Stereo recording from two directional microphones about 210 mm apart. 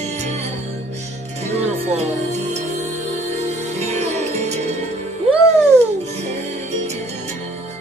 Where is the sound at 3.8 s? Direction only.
30° right (ahead or behind).